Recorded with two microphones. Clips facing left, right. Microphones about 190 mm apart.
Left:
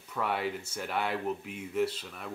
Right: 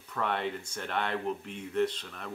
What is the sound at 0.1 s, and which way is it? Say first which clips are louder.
Speech: even; 5° left (ahead or behind).